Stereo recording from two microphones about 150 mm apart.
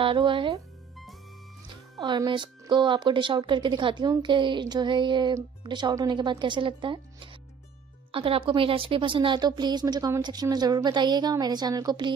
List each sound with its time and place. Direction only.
0.0 s speech: 35° right (ahead or behind)
2.0 s a woman's voice: 30° right (ahead or behind)